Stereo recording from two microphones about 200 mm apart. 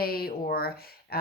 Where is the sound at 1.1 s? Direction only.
50° left (ahead or behind).